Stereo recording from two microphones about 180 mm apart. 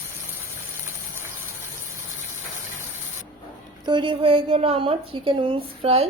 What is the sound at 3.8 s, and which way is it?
A woman's voice, 25° right (ahead or behind).